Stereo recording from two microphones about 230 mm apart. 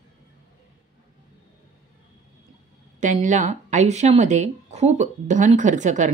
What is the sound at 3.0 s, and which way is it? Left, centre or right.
Speech, right.